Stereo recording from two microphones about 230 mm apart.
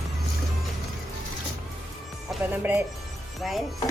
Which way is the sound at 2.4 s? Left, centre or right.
Centre.